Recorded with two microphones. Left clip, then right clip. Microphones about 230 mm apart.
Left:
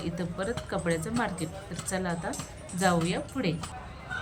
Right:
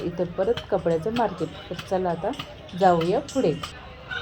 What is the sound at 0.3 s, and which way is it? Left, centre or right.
Speech, left.